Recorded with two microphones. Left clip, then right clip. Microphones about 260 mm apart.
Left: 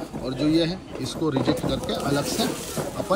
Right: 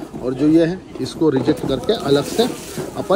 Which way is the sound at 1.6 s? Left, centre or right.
Left.